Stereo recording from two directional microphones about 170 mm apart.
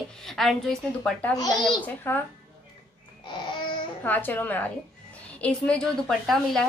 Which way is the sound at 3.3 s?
30° left (ahead or behind).